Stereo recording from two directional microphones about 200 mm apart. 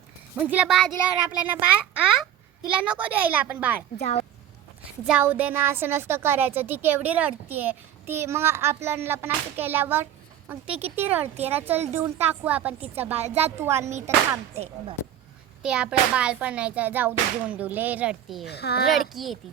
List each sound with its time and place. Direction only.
0.3 s a child's voice: 5° right (ahead or behind)
4.0 s speech: 30° left (ahead or behind)
5.0 s a woman's voice: 5° right (ahead or behind)
13.2 s a woman's voice: 30° right (ahead or behind)
13.6 s a woman's voice: 15° right (ahead or behind)
15.6 s a woman's voice: 5° right (ahead or behind)
18.4 s speech: 55° left (ahead or behind)
18.9 s a child's voice: centre (ahead or behind)